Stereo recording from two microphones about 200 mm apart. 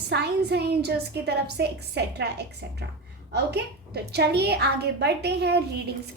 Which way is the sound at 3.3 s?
55° right (ahead or behind).